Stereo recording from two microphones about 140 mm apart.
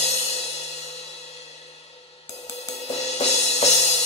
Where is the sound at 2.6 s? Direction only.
50° left (ahead or behind).